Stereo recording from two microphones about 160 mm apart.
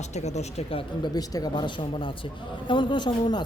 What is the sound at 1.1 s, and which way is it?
Speech, 25° left (ahead or behind).